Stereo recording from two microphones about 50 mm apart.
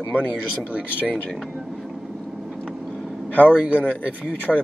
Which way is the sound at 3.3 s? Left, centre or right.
Left.